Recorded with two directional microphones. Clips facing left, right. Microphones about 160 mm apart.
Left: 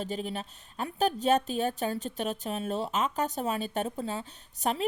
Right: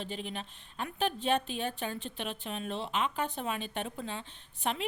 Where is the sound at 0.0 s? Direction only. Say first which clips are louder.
Left 5 dB; 40° left (ahead or behind).